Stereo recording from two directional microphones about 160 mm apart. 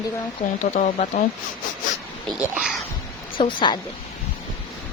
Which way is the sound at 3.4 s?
30° left (ahead or behind).